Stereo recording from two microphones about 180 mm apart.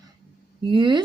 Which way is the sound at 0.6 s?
25° right (ahead or behind).